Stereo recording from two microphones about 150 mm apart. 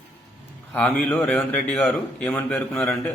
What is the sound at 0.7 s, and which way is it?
Speech, 10° left (ahead or behind).